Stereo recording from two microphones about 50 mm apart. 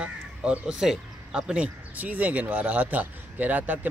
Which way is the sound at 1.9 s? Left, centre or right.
Right.